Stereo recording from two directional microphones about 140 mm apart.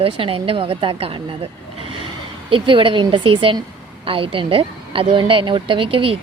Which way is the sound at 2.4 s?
40° right (ahead or behind).